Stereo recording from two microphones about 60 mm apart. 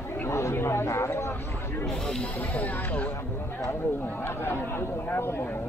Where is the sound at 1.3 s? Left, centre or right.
Left.